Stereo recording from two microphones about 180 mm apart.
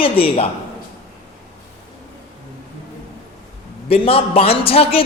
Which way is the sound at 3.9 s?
30° left (ahead or behind).